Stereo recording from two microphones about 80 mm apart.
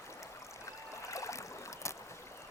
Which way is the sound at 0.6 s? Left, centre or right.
Left.